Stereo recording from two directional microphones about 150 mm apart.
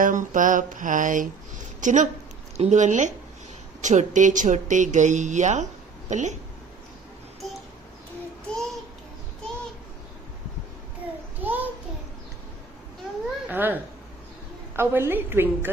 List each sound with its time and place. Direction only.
0.0 s speech: 60° right (ahead or behind)
11.4 s a sound: 10° right (ahead or behind)
13.5 s a child's voice: 15° right (ahead or behind)
14.8 s a woman's voice: 15° right (ahead or behind)